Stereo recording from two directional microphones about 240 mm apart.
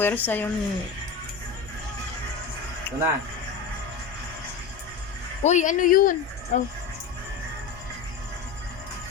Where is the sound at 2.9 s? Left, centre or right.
Centre.